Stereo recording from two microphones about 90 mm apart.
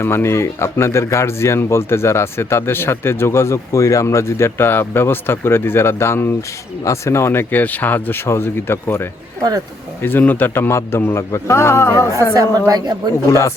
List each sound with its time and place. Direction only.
0.0 s speech: 25° left (ahead or behind)
12.4 s a woman's voice: 45° right (ahead or behind)